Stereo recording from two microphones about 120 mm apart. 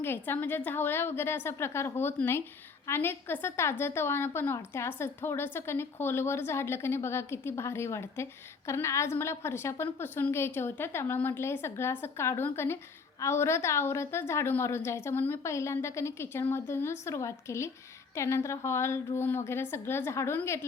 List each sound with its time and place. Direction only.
0.0 s a woman's voice: 20° left (ahead or behind)